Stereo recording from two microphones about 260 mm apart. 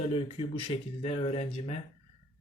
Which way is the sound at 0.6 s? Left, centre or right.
Left.